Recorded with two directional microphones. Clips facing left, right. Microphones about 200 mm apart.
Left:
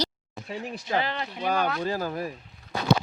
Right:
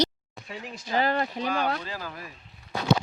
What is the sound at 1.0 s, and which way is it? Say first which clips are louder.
Speech: right 5 dB; 45° right (ahead or behind).